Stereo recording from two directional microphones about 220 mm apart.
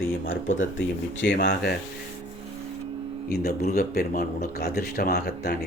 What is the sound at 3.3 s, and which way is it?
Speech, 45° left (ahead or behind).